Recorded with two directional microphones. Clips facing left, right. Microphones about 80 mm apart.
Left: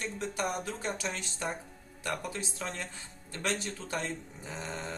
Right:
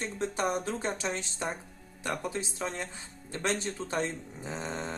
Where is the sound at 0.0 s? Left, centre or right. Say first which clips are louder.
Right 3 dB; right.